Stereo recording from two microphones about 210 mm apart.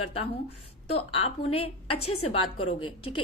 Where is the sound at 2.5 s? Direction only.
25° left (ahead or behind).